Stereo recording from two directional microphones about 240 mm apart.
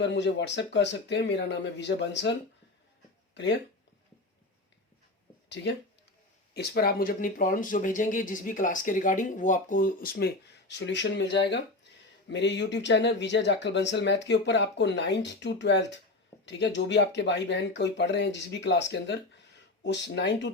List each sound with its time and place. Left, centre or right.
0.0 s speech: left
6.5 s speech: left